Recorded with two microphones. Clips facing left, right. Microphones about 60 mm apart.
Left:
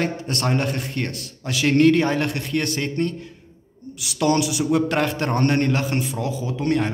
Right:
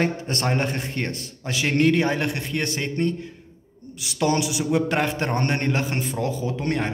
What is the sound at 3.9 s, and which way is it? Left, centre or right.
A man's voice, right.